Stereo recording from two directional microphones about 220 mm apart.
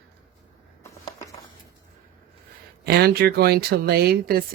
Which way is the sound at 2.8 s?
45° right (ahead or behind).